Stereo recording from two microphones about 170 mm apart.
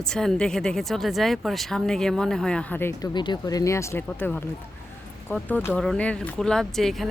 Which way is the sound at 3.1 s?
25° left (ahead or behind).